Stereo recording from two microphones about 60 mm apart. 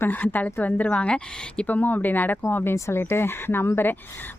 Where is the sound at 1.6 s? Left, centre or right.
Left.